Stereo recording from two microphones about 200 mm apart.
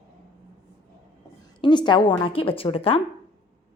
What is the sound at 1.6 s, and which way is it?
A woman's voice, 20° left (ahead or behind).